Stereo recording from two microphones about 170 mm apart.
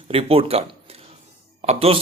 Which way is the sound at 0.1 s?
35° right (ahead or behind).